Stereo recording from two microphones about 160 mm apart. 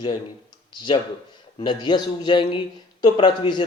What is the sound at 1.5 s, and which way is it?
Speech, 30° left (ahead or behind).